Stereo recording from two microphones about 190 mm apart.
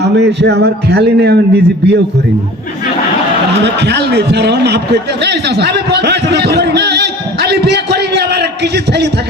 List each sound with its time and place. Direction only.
0.0 s a man's voice: 60° right (ahead or behind)
3.6 s a man's voice: 60° right (ahead or behind)